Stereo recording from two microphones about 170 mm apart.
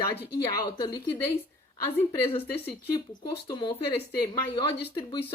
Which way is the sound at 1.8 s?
30° left (ahead or behind).